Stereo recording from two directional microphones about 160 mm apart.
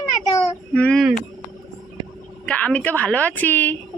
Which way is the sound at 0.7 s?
5° left (ahead or behind).